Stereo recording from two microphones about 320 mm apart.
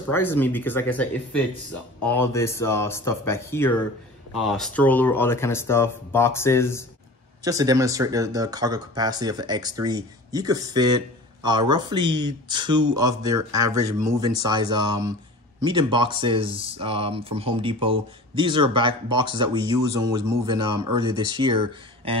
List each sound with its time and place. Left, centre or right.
0.1 s speech: centre
7.4 s speech: centre